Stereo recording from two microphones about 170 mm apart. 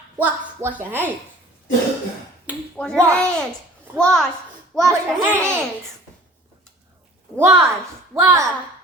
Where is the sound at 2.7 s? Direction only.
5° left (ahead or behind).